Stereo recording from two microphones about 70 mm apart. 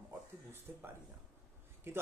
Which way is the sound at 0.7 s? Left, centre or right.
Right.